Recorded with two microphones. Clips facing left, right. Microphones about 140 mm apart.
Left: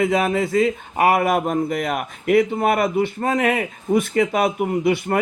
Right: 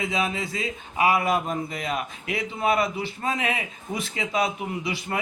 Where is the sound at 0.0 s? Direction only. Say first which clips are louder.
Left 8 dB; 55° left (ahead or behind).